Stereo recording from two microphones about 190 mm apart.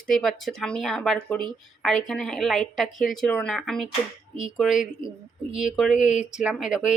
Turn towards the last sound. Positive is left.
turn(degrees=-5)  # may be behind; listen again after turning